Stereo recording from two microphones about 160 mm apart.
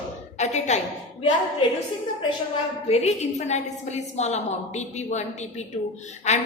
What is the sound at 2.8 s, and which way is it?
A woman's voice, 40° left (ahead or behind).